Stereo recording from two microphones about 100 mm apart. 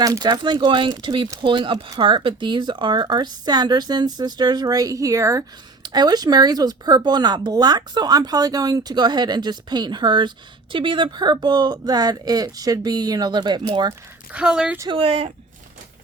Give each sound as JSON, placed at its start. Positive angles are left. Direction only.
{"t": 0.0, "sound": "speech", "side_deg": -40}
{"t": 5.8, "sound": "speech", "side_deg": -45}
{"t": 14.3, "sound": "speech", "side_deg": -10}
{"t": 14.8, "sound": "speech", "side_deg": -80}